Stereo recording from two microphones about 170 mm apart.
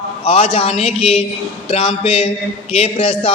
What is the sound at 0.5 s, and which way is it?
A man's voice, 35° left (ahead or behind).